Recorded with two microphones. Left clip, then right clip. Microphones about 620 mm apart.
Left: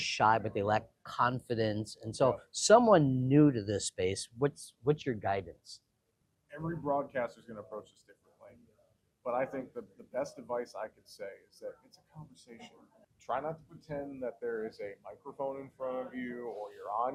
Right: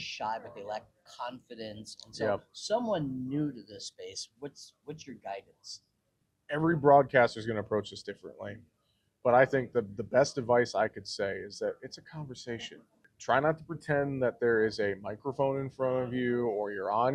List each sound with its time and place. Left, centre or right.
0.0 s speech: left
6.5 s speech: right
9.2 s speech: right
13.8 s speech: right